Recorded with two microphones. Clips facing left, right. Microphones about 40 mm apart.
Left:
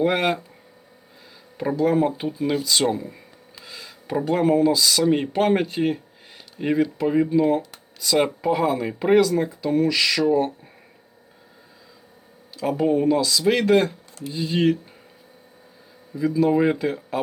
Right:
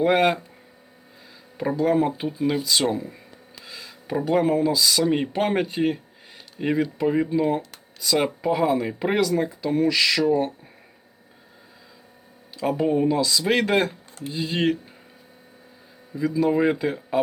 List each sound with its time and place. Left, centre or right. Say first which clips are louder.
0.0 s speech: right 2 dB; centre
1.8 s speech: left 1 dB; centre
12.5 s speech: left 1 dB; centre
13.5 s speech: left 4 dB; right
14.3 s speech: left 2 dB; centre
16.2 s speech: left 2 dB; centre